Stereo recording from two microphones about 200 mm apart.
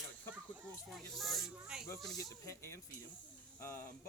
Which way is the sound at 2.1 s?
15° left (ahead or behind).